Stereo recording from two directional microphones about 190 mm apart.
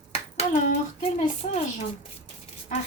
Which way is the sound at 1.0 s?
35° left (ahead or behind).